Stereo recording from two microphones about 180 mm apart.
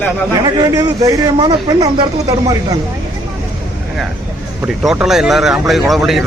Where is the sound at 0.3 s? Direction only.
25° right (ahead or behind).